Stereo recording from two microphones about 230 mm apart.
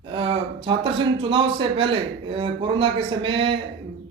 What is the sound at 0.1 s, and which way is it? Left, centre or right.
A man's voice, right.